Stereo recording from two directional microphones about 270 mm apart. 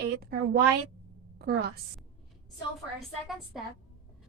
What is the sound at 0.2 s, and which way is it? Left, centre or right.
A woman's voice, right.